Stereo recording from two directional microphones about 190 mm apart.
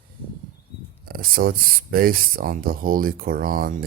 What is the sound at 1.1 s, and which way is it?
Speech, 50° right (ahead or behind).